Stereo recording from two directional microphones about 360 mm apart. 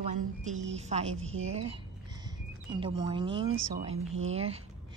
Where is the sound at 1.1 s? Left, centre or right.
Right.